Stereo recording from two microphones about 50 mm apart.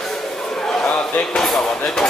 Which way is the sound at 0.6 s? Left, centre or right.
Centre.